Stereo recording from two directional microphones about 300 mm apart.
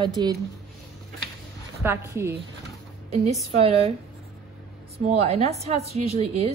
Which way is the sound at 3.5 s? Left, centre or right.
Centre.